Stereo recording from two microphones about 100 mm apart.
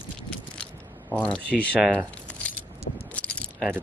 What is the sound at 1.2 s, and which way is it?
Speech, 10° left (ahead or behind).